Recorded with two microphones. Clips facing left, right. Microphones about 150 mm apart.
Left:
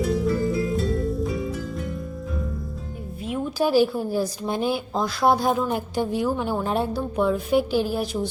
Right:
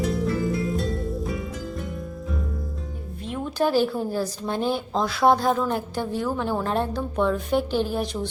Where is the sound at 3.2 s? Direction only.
10° left (ahead or behind).